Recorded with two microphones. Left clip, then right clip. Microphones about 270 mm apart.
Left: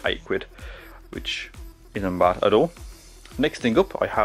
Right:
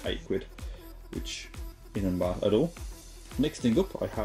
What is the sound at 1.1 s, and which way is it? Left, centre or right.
Speech, centre.